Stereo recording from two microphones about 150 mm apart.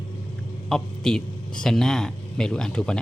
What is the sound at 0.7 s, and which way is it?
A man's voice, 5° left (ahead or behind).